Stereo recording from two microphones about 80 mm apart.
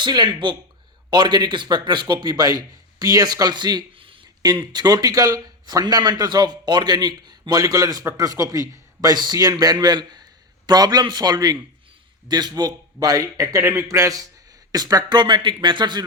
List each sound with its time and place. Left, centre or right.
0.0 s speech: right
1.1 s speech: right
2.2 s a man's voice: right
15.2 s speech: right